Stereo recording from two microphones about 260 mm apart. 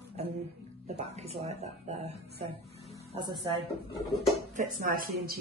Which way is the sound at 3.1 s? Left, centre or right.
Centre.